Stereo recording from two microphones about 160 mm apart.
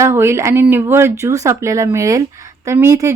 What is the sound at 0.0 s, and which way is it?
A woman's voice, 15° right (ahead or behind).